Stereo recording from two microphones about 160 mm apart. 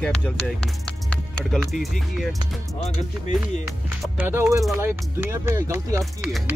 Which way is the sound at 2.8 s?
45° left (ahead or behind).